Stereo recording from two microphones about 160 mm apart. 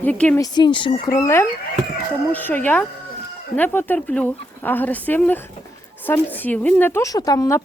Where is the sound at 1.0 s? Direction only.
20° left (ahead or behind).